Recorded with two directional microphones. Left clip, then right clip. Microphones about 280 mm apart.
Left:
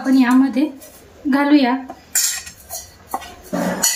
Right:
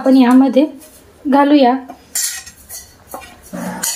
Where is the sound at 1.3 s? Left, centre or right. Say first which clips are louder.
Right 5 dB; centre.